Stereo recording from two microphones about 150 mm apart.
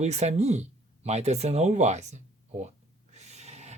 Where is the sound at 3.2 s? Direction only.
50° right (ahead or behind).